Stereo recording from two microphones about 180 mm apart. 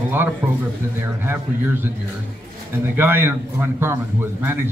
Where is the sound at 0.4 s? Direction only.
20° right (ahead or behind).